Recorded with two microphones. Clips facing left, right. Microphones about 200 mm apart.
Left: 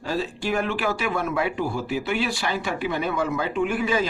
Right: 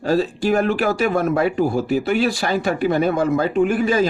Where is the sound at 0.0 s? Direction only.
40° right (ahead or behind).